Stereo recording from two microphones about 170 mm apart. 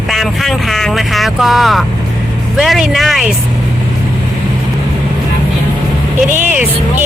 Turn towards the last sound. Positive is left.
turn(degrees=-10)  # may be behind; listen again after turning